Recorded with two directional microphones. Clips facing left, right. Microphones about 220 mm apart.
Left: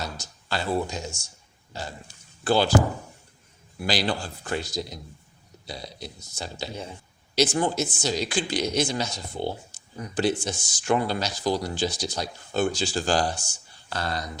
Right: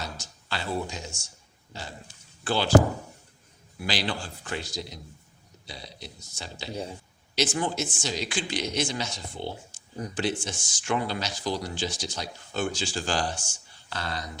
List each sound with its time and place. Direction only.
0.0 s speech: 40° left (ahead or behind)
2.4 s speech: 40° left (ahead or behind)
3.8 s speech: 40° left (ahead or behind)